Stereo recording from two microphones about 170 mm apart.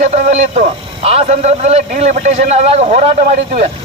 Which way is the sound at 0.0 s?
40° right (ahead or behind).